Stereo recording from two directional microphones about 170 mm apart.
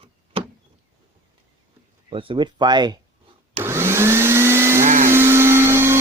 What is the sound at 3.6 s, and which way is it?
Vacuum cleaner, 15° right (ahead or behind).